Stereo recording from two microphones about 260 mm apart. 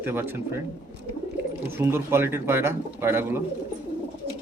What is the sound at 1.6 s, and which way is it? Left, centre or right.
Speech, centre.